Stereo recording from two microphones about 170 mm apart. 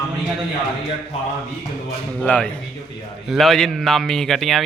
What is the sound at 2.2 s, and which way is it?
A man's voice, 5° left (ahead or behind).